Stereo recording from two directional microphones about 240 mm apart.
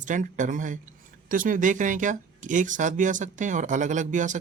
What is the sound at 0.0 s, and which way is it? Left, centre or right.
Speech, right.